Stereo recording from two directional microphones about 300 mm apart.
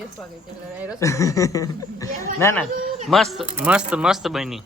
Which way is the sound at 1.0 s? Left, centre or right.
Centre.